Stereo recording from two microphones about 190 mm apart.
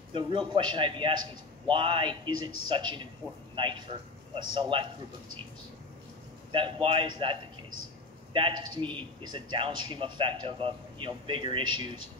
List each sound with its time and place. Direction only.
0.1 s a man's voice: 25° right (ahead or behind)
6.5 s speech: 25° right (ahead or behind)